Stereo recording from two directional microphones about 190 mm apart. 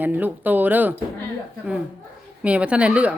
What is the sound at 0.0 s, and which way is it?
Speech, 10° right (ahead or behind).